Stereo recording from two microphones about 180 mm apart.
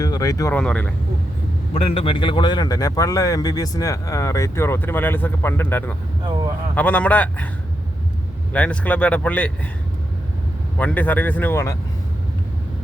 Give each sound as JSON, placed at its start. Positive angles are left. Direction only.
{"t": 0.0, "sound": "speech", "side_deg": 20}
{"t": 0.5, "sound": "a man's voice", "side_deg": 5}
{"t": 1.7, "sound": "a man's voice", "side_deg": 35}
{"t": 8.5, "sound": "a man's voice", "side_deg": 5}
{"t": 10.8, "sound": "a man's voice", "side_deg": 10}